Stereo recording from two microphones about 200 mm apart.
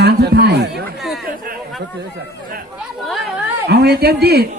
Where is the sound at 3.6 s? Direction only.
55° right (ahead or behind).